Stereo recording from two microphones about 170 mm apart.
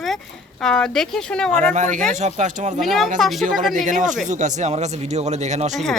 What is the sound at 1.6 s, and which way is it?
Speech, 45° right (ahead or behind).